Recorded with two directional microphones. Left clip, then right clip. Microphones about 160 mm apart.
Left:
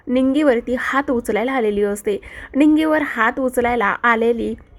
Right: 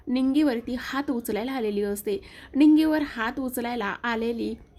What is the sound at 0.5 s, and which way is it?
A woman's voice, centre (ahead or behind).